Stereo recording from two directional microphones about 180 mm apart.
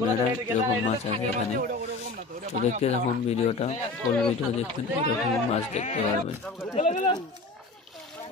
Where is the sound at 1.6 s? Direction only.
55° right (ahead or behind).